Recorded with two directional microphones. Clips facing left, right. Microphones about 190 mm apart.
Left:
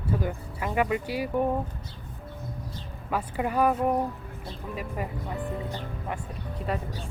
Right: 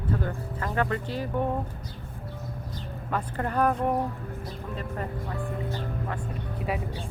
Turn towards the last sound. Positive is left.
turn(degrees=-5)  # may be behind; listen again after turning